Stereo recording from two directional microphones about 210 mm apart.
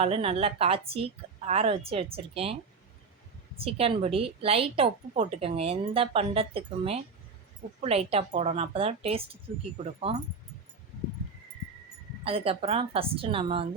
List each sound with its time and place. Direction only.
0.0 s a woman's voice: 30° right (ahead or behind)
3.6 s a woman's voice: 25° right (ahead or behind)
12.2 s a woman's voice: 25° right (ahead or behind)